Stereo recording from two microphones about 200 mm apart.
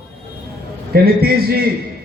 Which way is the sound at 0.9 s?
50° right (ahead or behind).